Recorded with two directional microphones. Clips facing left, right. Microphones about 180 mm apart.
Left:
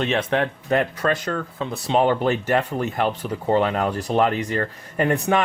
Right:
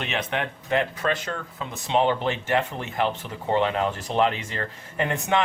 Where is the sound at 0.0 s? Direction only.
40° left (ahead or behind).